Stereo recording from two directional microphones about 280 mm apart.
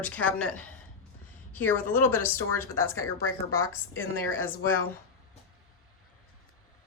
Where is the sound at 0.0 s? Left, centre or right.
Centre.